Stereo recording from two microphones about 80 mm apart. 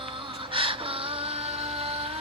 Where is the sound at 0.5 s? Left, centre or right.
Right.